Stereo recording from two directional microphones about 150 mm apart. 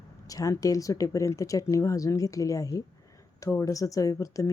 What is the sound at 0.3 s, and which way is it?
Speech, 25° left (ahead or behind).